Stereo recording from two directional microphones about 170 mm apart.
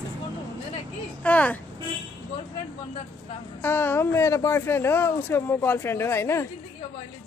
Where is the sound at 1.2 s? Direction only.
10° left (ahead or behind).